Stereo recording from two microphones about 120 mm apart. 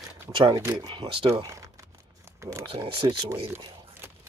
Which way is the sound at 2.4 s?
25° right (ahead or behind).